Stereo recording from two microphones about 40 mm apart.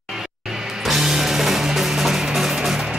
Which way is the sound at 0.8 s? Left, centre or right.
Centre.